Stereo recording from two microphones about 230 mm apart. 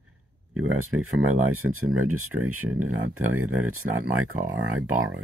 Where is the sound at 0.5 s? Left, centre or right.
Right.